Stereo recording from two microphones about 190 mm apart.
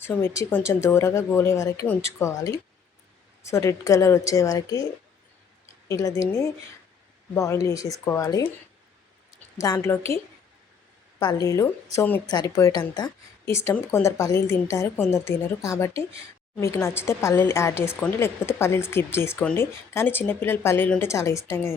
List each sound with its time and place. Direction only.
0.0 s speech: 10° left (ahead or behind)
5.9 s speech: 15° left (ahead or behind)
9.6 s speech: 15° left (ahead or behind)
11.2 s speech: 20° left (ahead or behind)